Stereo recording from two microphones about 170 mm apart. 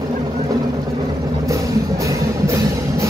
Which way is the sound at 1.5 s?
20° right (ahead or behind).